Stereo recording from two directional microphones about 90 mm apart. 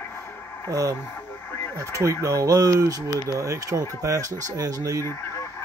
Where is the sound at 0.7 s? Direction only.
40° right (ahead or behind).